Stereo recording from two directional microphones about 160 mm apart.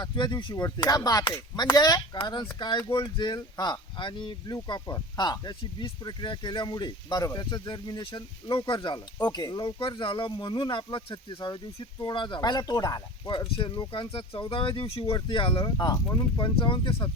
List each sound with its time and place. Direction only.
0.0 s speech: 30° left (ahead or behind)